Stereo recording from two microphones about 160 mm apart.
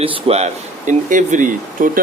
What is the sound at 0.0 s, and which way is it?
Speech, 40° right (ahead or behind).